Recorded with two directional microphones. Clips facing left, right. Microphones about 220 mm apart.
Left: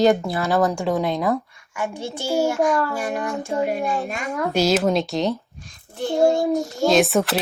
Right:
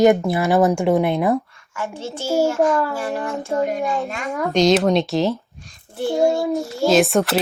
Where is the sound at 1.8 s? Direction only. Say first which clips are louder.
Even; 15° left (ahead or behind).